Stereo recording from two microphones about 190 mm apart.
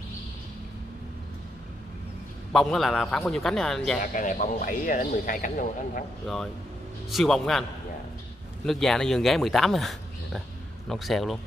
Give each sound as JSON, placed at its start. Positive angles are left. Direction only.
{"t": 2.5, "sound": "speech", "side_deg": 0}
{"t": 4.0, "sound": "speech", "side_deg": 45}
{"t": 6.2, "sound": "speech", "side_deg": 0}
{"t": 8.6, "sound": "speech", "side_deg": 0}